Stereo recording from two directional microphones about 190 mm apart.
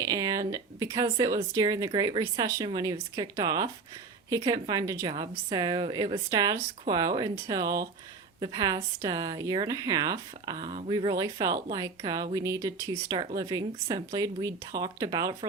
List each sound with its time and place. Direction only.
0.0 s speech: 20° right (ahead or behind)